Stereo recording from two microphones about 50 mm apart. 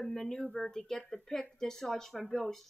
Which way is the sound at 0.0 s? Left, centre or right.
Centre.